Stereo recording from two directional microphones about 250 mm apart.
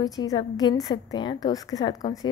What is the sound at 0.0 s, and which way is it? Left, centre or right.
A woman's voice, centre.